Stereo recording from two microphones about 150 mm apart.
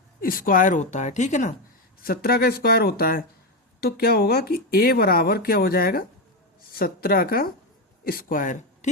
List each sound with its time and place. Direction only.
0.2 s speech: 70° left (ahead or behind); by 1.5 s 50° left (ahead or behind)
2.0 s a woman's voice: 80° left; by 8.9 s 55° left (ahead or behind)